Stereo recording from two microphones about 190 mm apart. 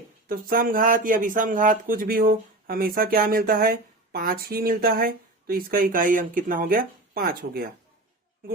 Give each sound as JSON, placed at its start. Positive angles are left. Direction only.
{"t": 0.3, "sound": "speech", "side_deg": -50}